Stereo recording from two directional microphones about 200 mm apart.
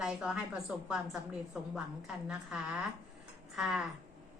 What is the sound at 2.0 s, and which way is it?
A woman's voice, 5° right (ahead or behind).